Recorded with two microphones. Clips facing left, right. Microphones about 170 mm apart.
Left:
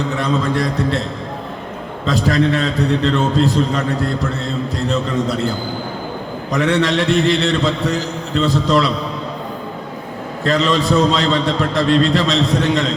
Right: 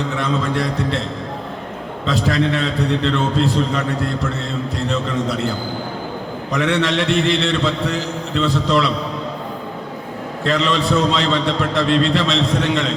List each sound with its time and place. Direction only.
0.2 s a man's voice: 40° left (ahead or behind)
2.0 s a man's voice: 40° left (ahead or behind)
6.5 s a man's voice: 40° left (ahead or behind)
10.4 s a man's voice: 40° left (ahead or behind)